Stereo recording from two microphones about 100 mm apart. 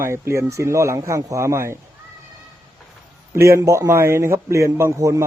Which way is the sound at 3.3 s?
30° right (ahead or behind).